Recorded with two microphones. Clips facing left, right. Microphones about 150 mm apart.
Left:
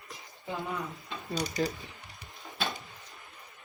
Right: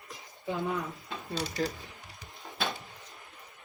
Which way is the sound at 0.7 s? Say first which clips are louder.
Right 2 dB; centre (ahead or behind).